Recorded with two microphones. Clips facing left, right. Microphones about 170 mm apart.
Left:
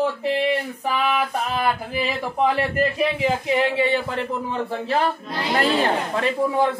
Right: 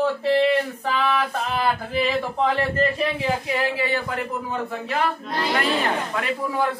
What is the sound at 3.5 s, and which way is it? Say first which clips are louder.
Speech: left 4 dB; 25° left (ahead or behind).